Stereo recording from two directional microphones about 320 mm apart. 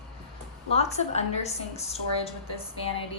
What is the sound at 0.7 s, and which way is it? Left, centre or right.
A woman's voice, left.